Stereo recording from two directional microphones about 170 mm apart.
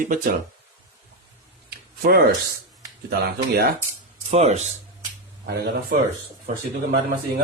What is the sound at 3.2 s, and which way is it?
Speech, 65° right (ahead or behind).